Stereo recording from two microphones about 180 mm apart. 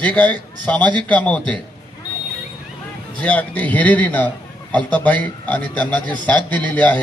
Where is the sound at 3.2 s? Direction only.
10° left (ahead or behind).